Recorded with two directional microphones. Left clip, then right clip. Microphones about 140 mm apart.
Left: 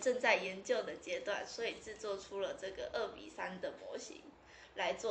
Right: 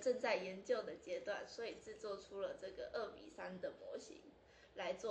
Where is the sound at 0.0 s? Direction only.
25° right (ahead or behind).